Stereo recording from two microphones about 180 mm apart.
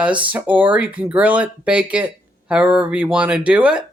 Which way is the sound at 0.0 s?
10° right (ahead or behind).